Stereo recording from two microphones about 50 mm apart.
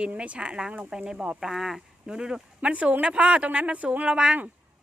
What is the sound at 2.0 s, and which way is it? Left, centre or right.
Speech, centre.